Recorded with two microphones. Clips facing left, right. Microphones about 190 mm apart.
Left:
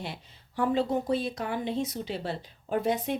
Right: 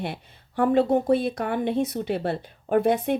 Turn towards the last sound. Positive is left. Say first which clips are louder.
# right 7 dB
turn(degrees=-60)  # may be behind; listen again after turning